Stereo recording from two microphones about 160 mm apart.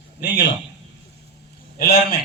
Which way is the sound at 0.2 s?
90° left.